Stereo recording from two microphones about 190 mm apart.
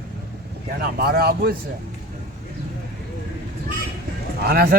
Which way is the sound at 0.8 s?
55° right (ahead or behind).